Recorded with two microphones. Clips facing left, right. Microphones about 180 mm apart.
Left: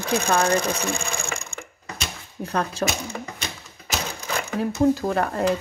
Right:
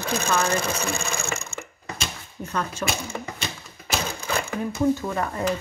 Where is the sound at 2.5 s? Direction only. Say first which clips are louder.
Left 4 dB; 35° left (ahead or behind).